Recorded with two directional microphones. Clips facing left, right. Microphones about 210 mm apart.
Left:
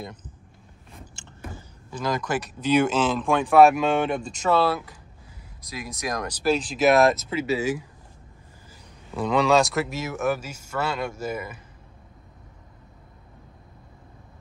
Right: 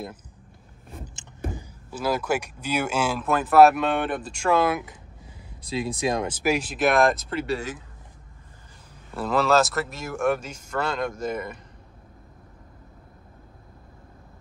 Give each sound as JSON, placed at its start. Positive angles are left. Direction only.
{"t": 1.0, "sound": "a sound", "side_deg": -20}
{"t": 1.9, "sound": "speech", "side_deg": -5}
{"t": 5.7, "sound": "speech", "side_deg": -30}
{"t": 6.7, "sound": "speech", "side_deg": 0}
{"t": 9.1, "sound": "speech", "side_deg": -5}